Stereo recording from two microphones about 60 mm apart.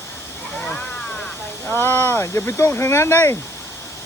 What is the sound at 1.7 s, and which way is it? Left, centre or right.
Speech, left.